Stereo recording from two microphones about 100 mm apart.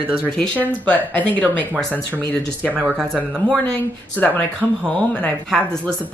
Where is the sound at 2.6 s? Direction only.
15° right (ahead or behind).